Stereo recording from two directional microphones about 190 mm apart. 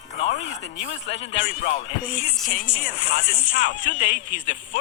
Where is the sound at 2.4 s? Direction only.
45° left (ahead or behind).